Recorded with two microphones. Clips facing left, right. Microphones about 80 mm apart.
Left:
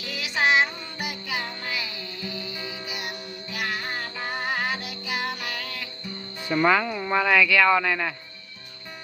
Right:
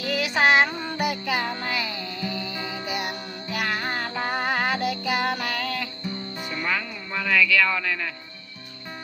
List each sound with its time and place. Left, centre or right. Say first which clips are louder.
0.1 s child singing: right 3 dB; right
0.9 s music: right 6 dB; right
3.8 s music: right 4 dB; right
4.8 s music: right 7 dB; right
6.5 s speech: left 8 dB; left
6.7 s speech: left 7 dB; left
7.6 s speech: left 4 dB; left